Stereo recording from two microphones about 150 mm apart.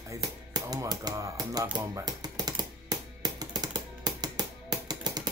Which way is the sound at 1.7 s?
30° right (ahead or behind).